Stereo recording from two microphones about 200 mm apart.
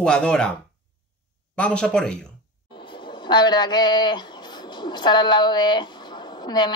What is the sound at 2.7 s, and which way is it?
Speech, 25° left (ahead or behind).